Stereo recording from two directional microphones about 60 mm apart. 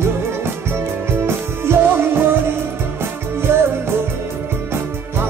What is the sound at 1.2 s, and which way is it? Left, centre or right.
Music, right.